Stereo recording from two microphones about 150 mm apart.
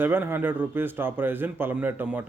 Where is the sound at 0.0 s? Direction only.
15° right (ahead or behind).